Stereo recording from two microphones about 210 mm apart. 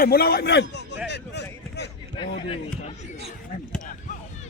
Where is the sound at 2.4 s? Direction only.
25° left (ahead or behind).